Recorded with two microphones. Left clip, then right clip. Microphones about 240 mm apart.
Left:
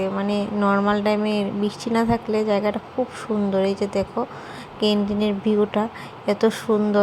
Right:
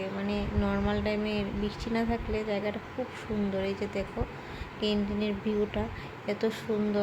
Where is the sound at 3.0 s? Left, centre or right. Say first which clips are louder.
Left 12 dB; left.